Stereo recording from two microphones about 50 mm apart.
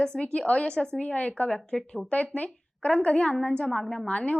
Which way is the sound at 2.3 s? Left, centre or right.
Left.